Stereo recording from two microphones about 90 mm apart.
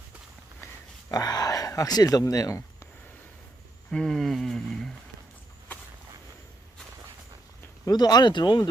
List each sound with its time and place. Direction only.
1.1 s speech: 45° left (ahead or behind)
3.9 s a sound: 5° left (ahead or behind)
7.9 s speech: 45° left (ahead or behind)